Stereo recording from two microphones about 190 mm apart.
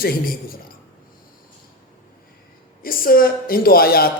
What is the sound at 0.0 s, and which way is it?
Speech, 50° left (ahead or behind).